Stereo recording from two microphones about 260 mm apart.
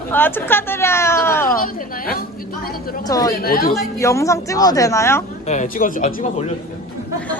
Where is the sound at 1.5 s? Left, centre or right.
Left.